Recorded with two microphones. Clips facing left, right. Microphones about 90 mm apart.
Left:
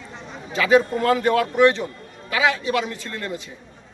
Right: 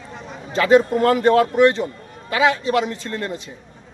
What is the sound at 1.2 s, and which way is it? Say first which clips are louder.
Speech: right 3 dB; 35° right (ahead or behind).